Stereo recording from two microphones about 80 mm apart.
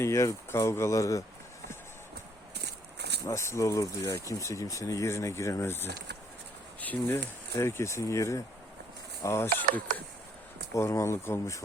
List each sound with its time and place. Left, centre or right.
0.0 s speech: left
3.2 s speech: left
7.5 s speech: left
10.8 s speech: left